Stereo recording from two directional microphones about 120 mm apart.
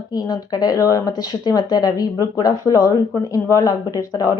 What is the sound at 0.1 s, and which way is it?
Speech, 30° left (ahead or behind).